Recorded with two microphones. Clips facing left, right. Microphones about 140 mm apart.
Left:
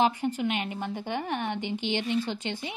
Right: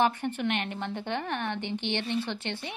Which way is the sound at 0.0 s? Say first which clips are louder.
Left 1 dB; 10° left (ahead or behind).